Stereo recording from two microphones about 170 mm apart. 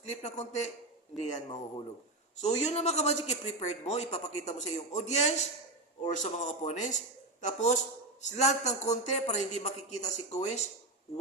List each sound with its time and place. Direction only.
0.0 s a man's voice: 40° left (ahead or behind)